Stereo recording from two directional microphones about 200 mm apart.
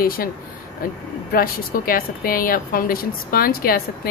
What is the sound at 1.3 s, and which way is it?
A woman's voice, 45° left (ahead or behind).